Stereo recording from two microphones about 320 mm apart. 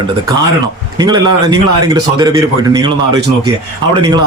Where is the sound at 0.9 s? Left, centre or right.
Centre.